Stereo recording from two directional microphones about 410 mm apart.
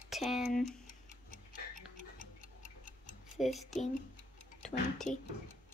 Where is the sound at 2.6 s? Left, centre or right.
Centre.